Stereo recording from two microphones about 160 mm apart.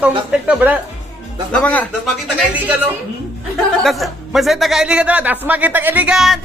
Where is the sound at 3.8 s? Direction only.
Centre (ahead or behind).